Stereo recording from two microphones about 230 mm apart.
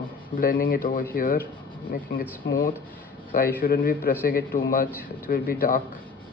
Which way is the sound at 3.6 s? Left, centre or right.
Left.